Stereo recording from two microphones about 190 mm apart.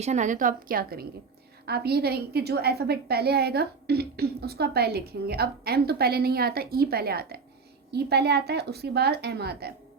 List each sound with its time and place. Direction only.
0.0 s a woman's voice: 40° right (ahead or behind); by 9.7 s 55° right (ahead or behind)